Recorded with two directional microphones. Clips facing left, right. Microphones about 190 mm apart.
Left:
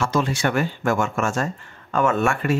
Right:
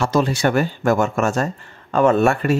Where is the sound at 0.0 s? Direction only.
35° right (ahead or behind).